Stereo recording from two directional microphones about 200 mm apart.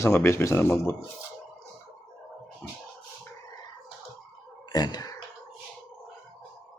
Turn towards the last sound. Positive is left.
turn(degrees=20)  # may be behind; listen again after turning